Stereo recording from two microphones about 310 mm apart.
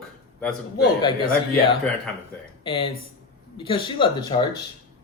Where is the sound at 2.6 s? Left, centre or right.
Centre.